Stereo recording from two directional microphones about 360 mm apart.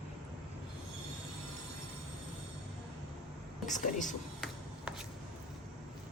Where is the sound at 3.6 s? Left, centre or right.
Left.